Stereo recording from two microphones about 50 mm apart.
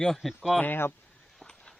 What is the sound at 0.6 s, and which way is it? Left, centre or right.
Speech, left.